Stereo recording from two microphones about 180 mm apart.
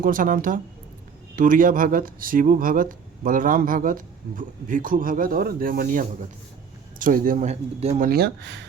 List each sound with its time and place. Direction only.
0.0 s speech: 50° right (ahead or behind)
8.1 s speech: 70° right (ahead or behind)